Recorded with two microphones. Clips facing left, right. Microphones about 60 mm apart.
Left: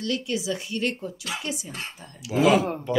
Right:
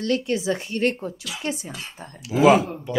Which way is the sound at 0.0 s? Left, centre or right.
Right.